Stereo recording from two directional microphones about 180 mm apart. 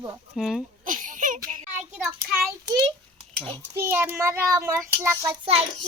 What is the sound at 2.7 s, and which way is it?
Speech, 25° right (ahead or behind).